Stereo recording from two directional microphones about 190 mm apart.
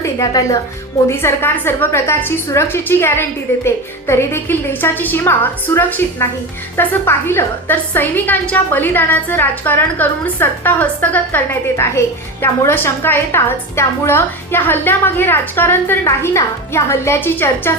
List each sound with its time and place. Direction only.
0.0 s a woman's voice: 15° left (ahead or behind)